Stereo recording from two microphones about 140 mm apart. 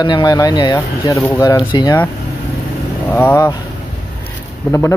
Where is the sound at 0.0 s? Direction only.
30° left (ahead or behind).